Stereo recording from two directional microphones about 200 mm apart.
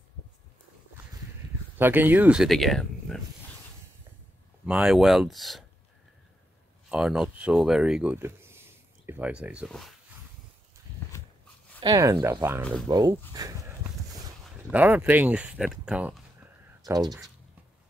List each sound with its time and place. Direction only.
1.8 s speech: 10° right (ahead or behind)
4.6 s speech: 5° right (ahead or behind)
6.9 s speech: 5° right (ahead or behind)
11.8 s speech: 20° right (ahead or behind)
14.7 s speech: 10° right (ahead or behind)
16.8 s speech: 20° right (ahead or behind)